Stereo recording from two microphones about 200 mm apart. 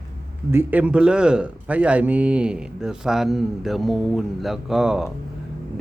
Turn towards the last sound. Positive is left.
turn(degrees=-5)  # may be behind; listen again after turning